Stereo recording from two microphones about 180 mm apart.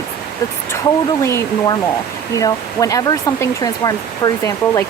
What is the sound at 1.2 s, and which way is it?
Speech, 15° left (ahead or behind).